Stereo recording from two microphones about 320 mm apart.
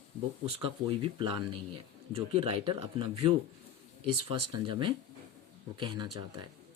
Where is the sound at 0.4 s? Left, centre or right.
Centre.